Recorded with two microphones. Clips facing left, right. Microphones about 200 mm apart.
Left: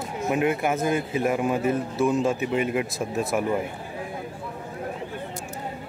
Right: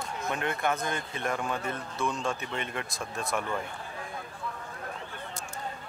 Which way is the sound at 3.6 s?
10° left (ahead or behind).